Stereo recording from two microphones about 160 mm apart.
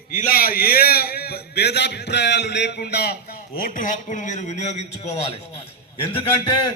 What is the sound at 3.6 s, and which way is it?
A man's voice, 55° left (ahead or behind).